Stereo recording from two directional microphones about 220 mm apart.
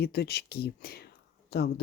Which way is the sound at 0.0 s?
45° left (ahead or behind).